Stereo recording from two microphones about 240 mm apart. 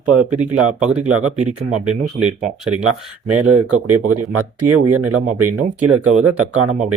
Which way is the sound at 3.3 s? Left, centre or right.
Right.